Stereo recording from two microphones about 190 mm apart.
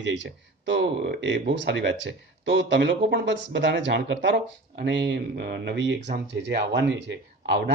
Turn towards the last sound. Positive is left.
turn(degrees=-65)  # may be behind; listen again after turning